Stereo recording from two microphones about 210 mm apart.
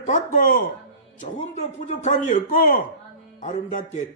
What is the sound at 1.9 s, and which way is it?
Speech, 35° left (ahead or behind).